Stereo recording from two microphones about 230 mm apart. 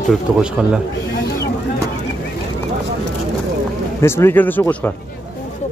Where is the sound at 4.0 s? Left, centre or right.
Centre.